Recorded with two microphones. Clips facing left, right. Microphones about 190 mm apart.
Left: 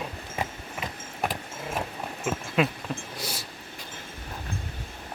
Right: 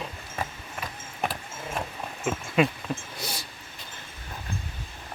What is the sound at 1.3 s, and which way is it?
Vehicle, 10° left (ahead or behind).